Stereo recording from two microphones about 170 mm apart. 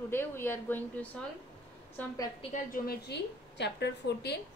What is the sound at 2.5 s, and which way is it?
A woman's voice, 55° left (ahead or behind).